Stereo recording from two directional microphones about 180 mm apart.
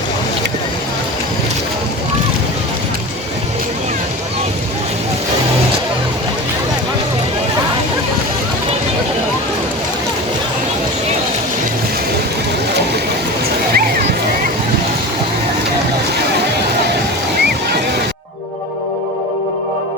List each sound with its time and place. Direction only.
13.7 s music: 55° right (ahead or behind)